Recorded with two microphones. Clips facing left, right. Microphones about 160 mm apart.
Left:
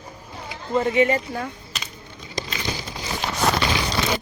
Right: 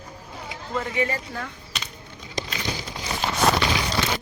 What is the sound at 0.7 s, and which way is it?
Speech, 25° left (ahead or behind).